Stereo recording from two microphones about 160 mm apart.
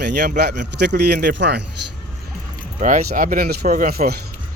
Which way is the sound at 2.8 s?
55° right (ahead or behind).